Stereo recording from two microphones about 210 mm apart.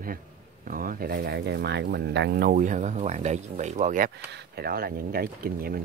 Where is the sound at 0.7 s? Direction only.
40° right (ahead or behind).